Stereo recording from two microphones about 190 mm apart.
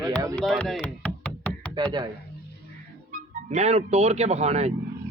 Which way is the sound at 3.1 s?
40° right (ahead or behind).